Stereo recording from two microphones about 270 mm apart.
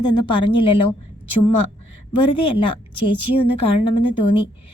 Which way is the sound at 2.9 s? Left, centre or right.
Left.